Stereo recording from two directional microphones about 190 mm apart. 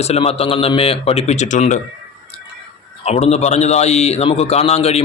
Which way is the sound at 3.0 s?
35° left (ahead or behind).